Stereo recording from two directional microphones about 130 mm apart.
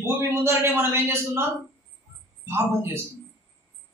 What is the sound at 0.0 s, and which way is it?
A man's voice, 20° right (ahead or behind).